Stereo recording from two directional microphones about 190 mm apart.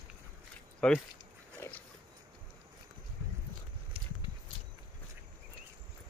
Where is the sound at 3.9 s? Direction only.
30° right (ahead or behind).